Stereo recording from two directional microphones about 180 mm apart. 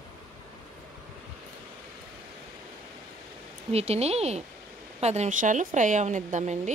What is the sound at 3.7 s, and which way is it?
Speech, 35° right (ahead or behind).